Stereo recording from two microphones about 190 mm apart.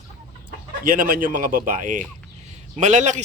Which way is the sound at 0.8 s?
45° right (ahead or behind).